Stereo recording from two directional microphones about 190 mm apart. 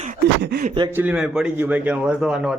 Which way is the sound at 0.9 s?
10° right (ahead or behind).